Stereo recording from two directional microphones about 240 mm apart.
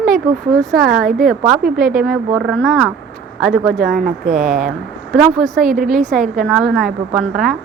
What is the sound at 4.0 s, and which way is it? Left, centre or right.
Speech, right.